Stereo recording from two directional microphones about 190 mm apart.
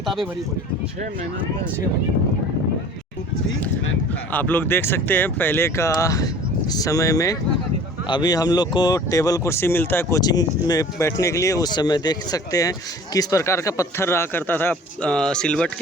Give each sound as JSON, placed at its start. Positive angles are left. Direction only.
{"t": 4.3, "sound": "speech", "side_deg": 10}